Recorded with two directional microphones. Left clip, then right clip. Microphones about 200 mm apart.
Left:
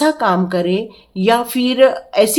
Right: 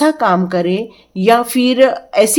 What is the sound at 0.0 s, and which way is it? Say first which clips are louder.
A woman's voice: right 2 dB; 20° right (ahead or behind).